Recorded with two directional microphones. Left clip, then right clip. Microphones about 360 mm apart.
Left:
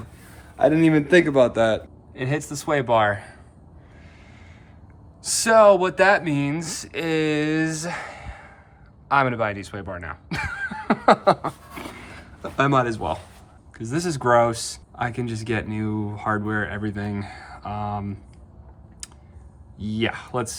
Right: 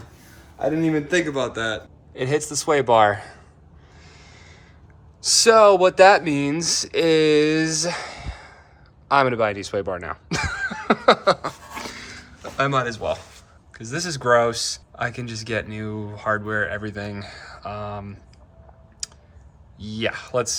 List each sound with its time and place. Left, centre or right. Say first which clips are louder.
0.6 s a man's voice: left 4 dB; left
2.1 s speech: right 4 dB; centre
5.2 s speech: right 1 dB; centre
11.9 s a sound: right 3 dB; centre
13.7 s speech: left 1 dB; centre
19.0 s typing: right 8 dB; centre
19.8 s speech: even; centre